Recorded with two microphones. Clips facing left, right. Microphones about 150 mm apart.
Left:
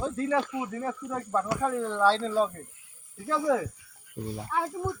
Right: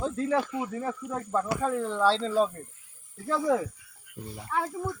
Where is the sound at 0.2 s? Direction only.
5° right (ahead or behind).